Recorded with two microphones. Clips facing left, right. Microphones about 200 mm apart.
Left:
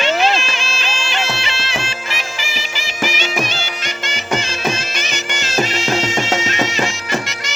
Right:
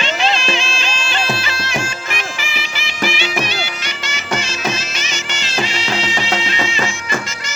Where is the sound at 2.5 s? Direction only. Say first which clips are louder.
Even; 40° left (ahead or behind).